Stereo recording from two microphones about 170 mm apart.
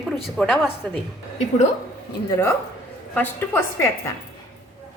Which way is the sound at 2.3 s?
15° left (ahead or behind).